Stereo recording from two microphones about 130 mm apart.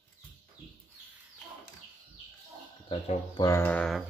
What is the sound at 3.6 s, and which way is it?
Bird, 10° left (ahead or behind).